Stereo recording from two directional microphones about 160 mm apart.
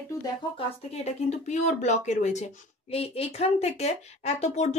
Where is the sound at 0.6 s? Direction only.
40° left (ahead or behind).